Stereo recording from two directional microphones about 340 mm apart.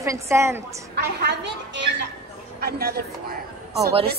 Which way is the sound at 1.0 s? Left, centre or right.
Right.